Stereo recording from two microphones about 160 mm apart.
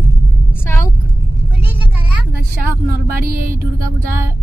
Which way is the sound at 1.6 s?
10° right (ahead or behind).